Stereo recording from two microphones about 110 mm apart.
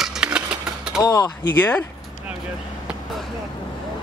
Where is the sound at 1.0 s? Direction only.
35° left (ahead or behind).